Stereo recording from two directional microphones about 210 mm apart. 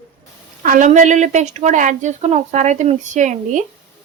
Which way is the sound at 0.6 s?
40° right (ahead or behind).